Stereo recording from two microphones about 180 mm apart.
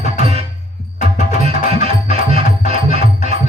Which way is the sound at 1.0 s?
35° right (ahead or behind).